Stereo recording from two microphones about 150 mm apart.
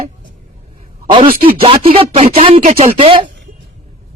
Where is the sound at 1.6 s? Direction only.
40° right (ahead or behind).